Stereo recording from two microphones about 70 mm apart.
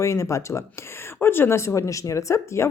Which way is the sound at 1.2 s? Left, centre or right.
Left.